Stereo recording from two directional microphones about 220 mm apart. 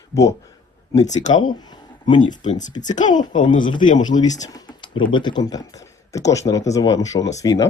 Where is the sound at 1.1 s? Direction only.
35° left (ahead or behind).